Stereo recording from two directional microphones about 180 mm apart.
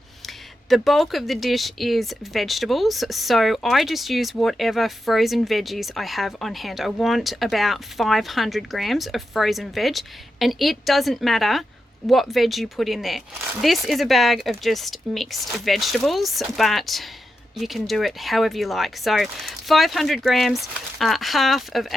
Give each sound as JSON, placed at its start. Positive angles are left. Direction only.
{"t": 0.7, "sound": "speech", "side_deg": 0}